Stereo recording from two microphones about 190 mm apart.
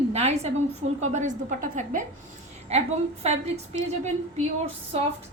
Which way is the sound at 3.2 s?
35° right (ahead or behind).